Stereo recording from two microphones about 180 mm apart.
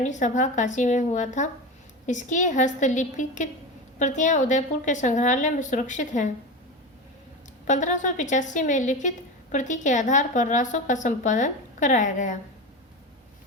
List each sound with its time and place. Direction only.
0.0 s a woman's voice: 45° left (ahead or behind)
7.7 s a woman's voice: 45° left (ahead or behind)